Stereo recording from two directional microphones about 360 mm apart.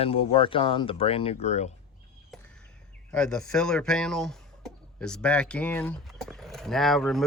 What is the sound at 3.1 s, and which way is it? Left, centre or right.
A man's voice, centre.